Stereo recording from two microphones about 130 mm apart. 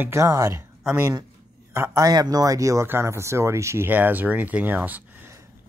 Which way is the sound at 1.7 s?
20° right (ahead or behind).